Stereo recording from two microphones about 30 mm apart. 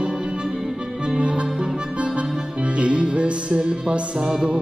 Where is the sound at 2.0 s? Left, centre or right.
Right.